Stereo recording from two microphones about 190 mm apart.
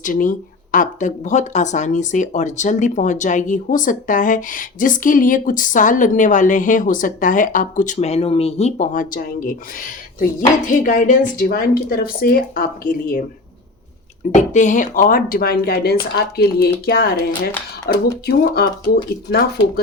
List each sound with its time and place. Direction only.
0.0 s speech: 45° left (ahead or behind)
7.9 s speech: 30° left (ahead or behind)
10.7 s speech: 45° left (ahead or behind)
14.3 s speech: 40° left (ahead or behind); by 19.8 s 55° left (ahead or behind)